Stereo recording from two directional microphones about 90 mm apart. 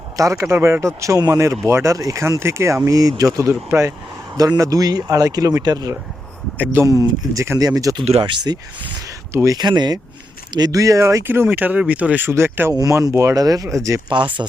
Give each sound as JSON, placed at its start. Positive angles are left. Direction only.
{"t": 0.2, "sound": "speech", "side_deg": -35}
{"t": 3.5, "sound": "speech", "side_deg": -30}
{"t": 7.9, "sound": "speech", "side_deg": -60}
{"t": 9.0, "sound": "a sound", "side_deg": -35}
{"t": 9.6, "sound": "speech", "side_deg": -50}
{"t": 11.2, "sound": "speech", "side_deg": -25}
{"t": 12.7, "sound": "speech", "side_deg": -35}
{"t": 14.1, "sound": "speech", "side_deg": -60}